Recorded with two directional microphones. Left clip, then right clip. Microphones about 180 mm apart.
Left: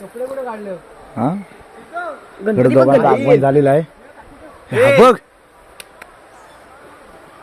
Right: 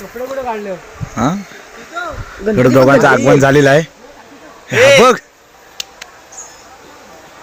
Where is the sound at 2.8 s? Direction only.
35° right (ahead or behind).